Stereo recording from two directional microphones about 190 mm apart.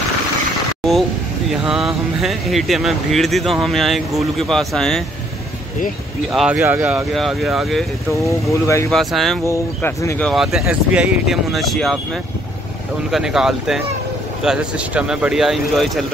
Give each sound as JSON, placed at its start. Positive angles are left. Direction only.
{"t": 1.5, "sound": "speech", "side_deg": 0}
{"t": 6.3, "sound": "speech", "side_deg": -5}
{"t": 8.1, "sound": "speech", "side_deg": 15}
{"t": 8.9, "sound": "speech", "side_deg": 0}
{"t": 9.5, "sound": "speech", "side_deg": 15}
{"t": 13.1, "sound": "speech", "side_deg": -5}